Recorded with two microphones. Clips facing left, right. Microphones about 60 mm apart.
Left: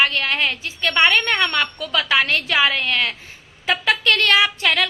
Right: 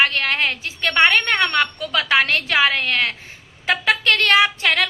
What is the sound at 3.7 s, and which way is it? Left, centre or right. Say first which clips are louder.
Music: even; right.